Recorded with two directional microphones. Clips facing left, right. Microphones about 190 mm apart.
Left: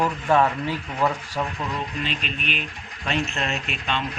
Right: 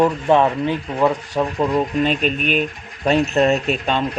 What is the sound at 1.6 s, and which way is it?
Speech, 45° right (ahead or behind).